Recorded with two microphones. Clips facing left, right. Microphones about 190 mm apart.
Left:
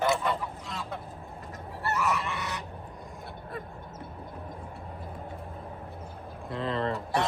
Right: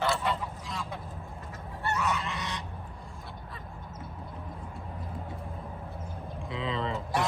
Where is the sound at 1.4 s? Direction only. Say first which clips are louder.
Left 1 dB; 35° left (ahead or behind).